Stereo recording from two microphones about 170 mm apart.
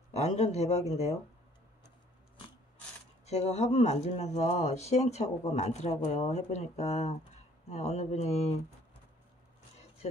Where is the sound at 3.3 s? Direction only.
40° left (ahead or behind).